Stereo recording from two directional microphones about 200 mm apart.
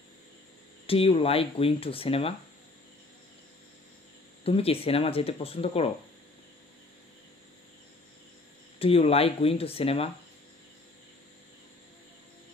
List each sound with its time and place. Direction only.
0.8 s speech: 30° left (ahead or behind)
4.5 s speech: 30° left (ahead or behind)
8.7 s speech: 30° left (ahead or behind)